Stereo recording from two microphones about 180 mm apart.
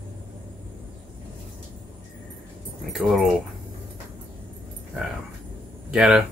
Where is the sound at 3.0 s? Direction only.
Centre (ahead or behind).